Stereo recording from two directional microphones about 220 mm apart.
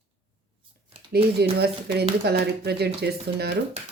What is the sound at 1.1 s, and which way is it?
Speech, 45° right (ahead or behind).